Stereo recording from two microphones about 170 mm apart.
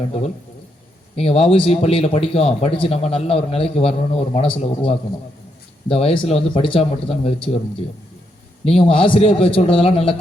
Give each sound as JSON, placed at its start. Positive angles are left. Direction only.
{"t": 1.1, "sound": "speech", "side_deg": 35}
{"t": 8.6, "sound": "speech", "side_deg": 30}